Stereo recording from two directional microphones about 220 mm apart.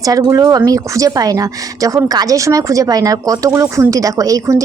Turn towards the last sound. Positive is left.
turn(degrees=-15)  # may be behind; listen again after turning